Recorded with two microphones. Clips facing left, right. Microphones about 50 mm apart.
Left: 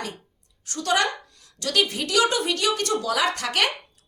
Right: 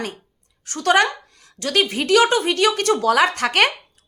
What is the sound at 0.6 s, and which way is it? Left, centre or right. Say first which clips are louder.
A woman's voice: right 6 dB; right.